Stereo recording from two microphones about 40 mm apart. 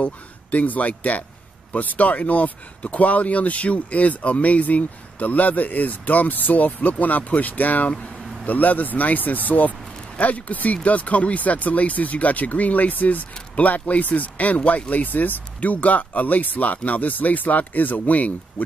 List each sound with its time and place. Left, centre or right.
0.0 s speech: left